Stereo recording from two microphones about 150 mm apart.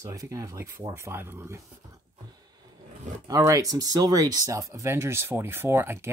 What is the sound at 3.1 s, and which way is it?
Speech, 55° right (ahead or behind).